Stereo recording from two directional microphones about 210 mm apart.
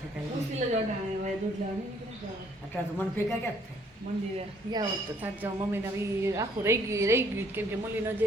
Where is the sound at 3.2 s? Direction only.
10° left (ahead or behind).